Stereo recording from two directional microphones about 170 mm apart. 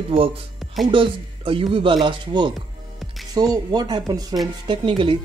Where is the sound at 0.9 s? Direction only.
30° right (ahead or behind).